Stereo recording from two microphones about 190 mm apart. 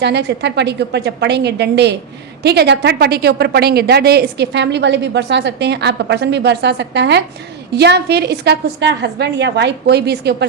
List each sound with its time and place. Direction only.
0.0 s a woman's voice: 60° right (ahead or behind)